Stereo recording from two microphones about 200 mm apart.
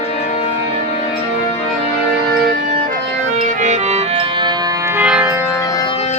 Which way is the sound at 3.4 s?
40° right (ahead or behind).